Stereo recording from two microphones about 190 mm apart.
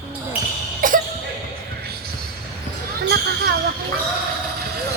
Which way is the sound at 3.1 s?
60° right (ahead or behind).